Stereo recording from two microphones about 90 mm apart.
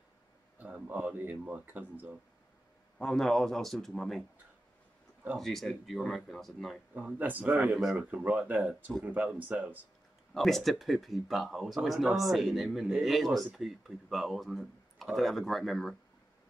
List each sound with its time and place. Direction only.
0.6 s speech: 15° right (ahead or behind)
3.0 s speech: 5° left (ahead or behind)
5.4 s speech: 5° left (ahead or behind)
7.2 s speech: 20° right (ahead or behind)
10.3 s speech: 5° left (ahead or behind)